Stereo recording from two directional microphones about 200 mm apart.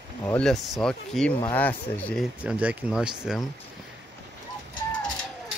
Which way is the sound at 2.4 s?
5° right (ahead or behind).